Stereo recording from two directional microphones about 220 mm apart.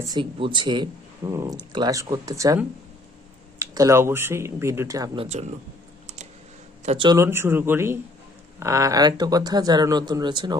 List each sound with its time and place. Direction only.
0.0 s speech: 20° right (ahead or behind)
6.8 s speech: 25° right (ahead or behind)